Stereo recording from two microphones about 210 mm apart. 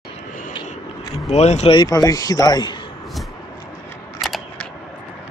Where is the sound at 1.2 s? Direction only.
30° left (ahead or behind).